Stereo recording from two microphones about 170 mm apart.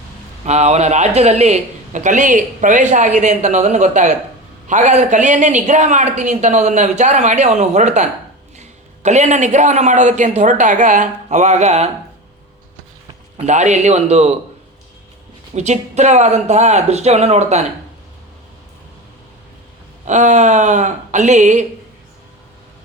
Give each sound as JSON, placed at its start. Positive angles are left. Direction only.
{"t": 0.4, "sound": "a man's voice", "side_deg": -40}
{"t": 9.0, "sound": "a man's voice", "side_deg": -45}
{"t": 13.3, "sound": "speech", "side_deg": -40}
{"t": 15.5, "sound": "speech", "side_deg": -40}
{"t": 20.1, "sound": "a man's voice", "side_deg": -45}